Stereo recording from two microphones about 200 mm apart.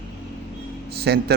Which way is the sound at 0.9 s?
55° right (ahead or behind).